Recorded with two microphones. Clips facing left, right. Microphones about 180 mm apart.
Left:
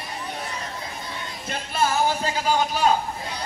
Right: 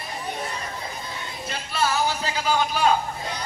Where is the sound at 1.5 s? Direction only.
50° left (ahead or behind).